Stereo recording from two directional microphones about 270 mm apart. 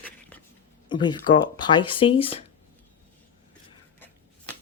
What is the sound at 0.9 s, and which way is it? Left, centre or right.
Speech, centre.